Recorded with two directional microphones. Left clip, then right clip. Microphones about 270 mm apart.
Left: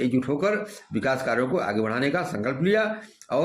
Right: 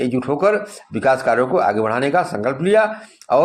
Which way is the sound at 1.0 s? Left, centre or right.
Right.